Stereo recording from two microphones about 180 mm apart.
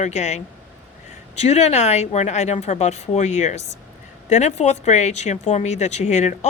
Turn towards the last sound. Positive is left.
turn(degrees=40)  # may be behind; listen again after turning